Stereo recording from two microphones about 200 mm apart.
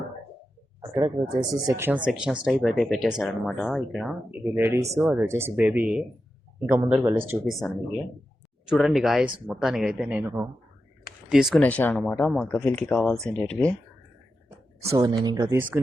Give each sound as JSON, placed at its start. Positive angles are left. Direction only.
{"t": 0.8, "sound": "a sound", "side_deg": -15}
{"t": 1.5, "sound": "speech", "side_deg": -15}
{"t": 7.6, "sound": "speech", "side_deg": 5}
{"t": 11.6, "sound": "speech", "side_deg": 10}
{"t": 14.8, "sound": "speech", "side_deg": -20}